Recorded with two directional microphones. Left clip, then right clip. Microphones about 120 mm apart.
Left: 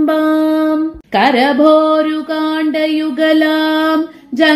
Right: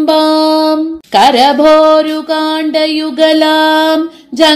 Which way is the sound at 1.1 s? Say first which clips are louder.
Right 5 dB; 35° right (ahead or behind).